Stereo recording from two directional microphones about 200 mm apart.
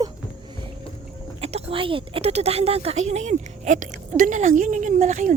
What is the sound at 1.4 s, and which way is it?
Speech, 30° right (ahead or behind).